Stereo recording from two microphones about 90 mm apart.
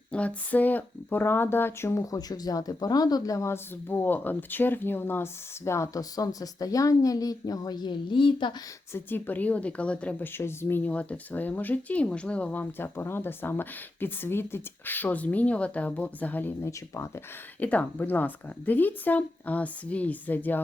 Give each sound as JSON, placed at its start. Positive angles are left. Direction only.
{"t": 0.1, "sound": "speech", "side_deg": 15}
{"t": 2.0, "sound": "speech", "side_deg": 45}
{"t": 3.8, "sound": "speech", "side_deg": 20}
{"t": 8.9, "sound": "speech", "side_deg": 25}
{"t": 10.3, "sound": "speech", "side_deg": 25}